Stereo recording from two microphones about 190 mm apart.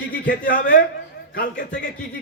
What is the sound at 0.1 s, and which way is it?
A man's voice, 45° left (ahead or behind).